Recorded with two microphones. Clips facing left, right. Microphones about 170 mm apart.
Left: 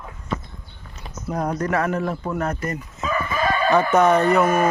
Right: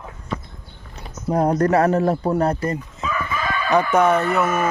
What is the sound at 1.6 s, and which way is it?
Speech, 35° right (ahead or behind).